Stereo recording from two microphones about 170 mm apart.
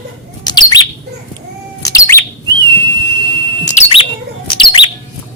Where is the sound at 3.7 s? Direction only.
40° left (ahead or behind).